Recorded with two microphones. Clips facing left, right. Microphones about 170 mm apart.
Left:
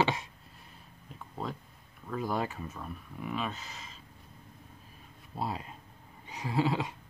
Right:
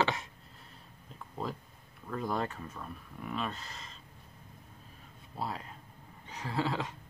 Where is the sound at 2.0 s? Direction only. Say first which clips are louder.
Left 1 dB; centre (ahead or behind).